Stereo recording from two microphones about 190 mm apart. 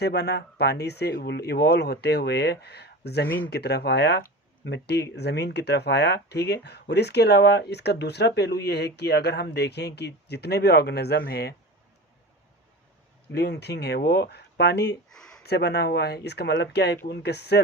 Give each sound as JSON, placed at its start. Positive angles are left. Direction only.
{"t": 0.0, "sound": "speech", "side_deg": 60}
{"t": 3.2, "sound": "speech", "side_deg": 10}
{"t": 3.5, "sound": "speech", "side_deg": 60}
{"t": 13.3, "sound": "speech", "side_deg": 60}
{"t": 15.1, "sound": "a sound", "side_deg": 5}
{"t": 15.4, "sound": "speech", "side_deg": 60}